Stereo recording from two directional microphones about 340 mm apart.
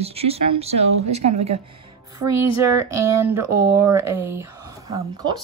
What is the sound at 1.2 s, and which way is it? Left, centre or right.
Speech, right.